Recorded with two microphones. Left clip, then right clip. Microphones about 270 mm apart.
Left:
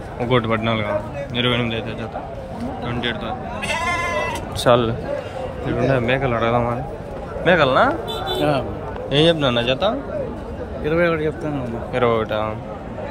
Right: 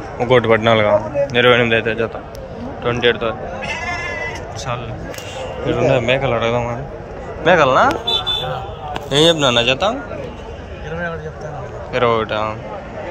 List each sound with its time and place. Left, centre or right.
0.2 s a man's voice: centre
4.6 s a man's voice: left
5.7 s a man's voice: centre
9.1 s a man's voice: centre
10.9 s speech: left
11.9 s a man's voice: centre